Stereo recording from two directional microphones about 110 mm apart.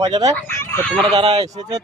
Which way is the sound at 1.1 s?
60° right (ahead or behind).